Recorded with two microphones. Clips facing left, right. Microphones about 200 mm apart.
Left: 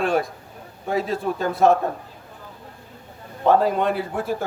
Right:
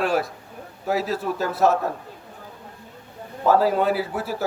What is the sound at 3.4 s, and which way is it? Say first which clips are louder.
A man's voice: even; 5° right (ahead or behind).